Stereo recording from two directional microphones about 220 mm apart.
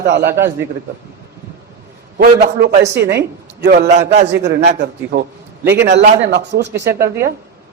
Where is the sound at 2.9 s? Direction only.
50° right (ahead or behind).